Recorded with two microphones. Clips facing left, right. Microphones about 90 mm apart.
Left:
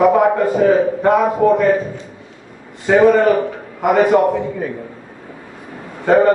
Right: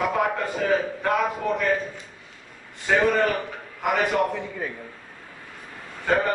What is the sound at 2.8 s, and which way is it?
A man's voice, 15° left (ahead or behind).